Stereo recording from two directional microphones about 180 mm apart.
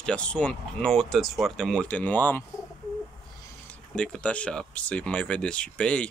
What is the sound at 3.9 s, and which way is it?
Speech, 5° left (ahead or behind).